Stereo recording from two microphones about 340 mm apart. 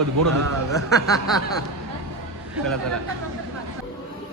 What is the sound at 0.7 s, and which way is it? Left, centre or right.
Speech, centre.